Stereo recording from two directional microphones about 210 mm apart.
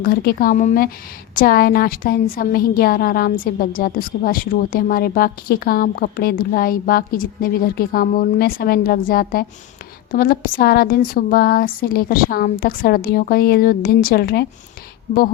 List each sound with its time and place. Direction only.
0.0 s a woman's voice: 45° left (ahead or behind)